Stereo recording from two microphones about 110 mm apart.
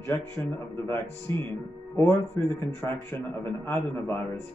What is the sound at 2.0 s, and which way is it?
A man's voice, 20° left (ahead or behind).